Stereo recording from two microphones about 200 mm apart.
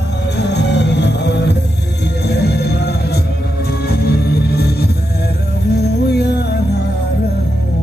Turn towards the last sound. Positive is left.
turn(degrees=55)  # may be behind; listen again after turning